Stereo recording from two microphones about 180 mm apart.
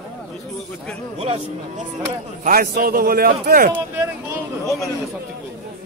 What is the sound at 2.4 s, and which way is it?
A man's voice, 55° right (ahead or behind).